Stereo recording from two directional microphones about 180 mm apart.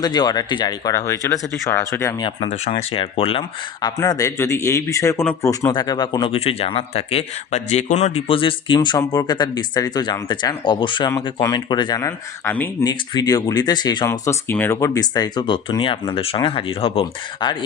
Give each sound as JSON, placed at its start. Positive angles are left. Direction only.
{"t": 0.0, "sound": "speech", "side_deg": 20}
{"t": 2.5, "sound": "speech", "side_deg": 40}